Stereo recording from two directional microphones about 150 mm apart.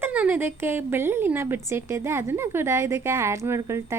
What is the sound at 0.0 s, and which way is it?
A woman's voice, 10° right (ahead or behind).